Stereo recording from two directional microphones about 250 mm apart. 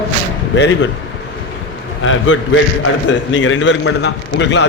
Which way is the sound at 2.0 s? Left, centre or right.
Left.